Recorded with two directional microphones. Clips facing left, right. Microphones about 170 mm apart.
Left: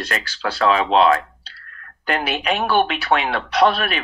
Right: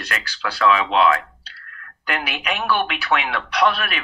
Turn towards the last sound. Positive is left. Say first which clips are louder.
# left 3 dB
turn(degrees=30)  # may be behind; listen again after turning